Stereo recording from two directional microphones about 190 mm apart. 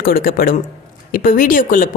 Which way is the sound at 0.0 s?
50° left (ahead or behind).